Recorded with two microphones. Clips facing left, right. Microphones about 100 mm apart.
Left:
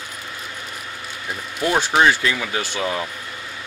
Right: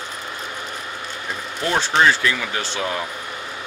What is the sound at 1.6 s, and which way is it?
Speech, 10° left (ahead or behind).